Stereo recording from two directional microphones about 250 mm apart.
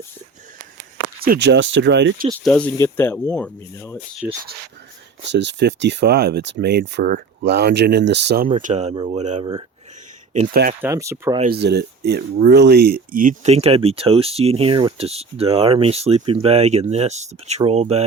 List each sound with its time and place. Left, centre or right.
1.2 s speech: right
2.4 s speech: centre
4.2 s speech: centre
5.3 s speech: right
8.4 s speech: right
10.8 s speech: centre
11.3 s speech: right